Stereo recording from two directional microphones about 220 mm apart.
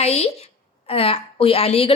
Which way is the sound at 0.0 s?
30° left (ahead or behind).